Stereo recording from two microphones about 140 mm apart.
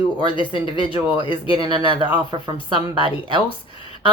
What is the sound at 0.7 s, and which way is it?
Speech, 35° right (ahead or behind).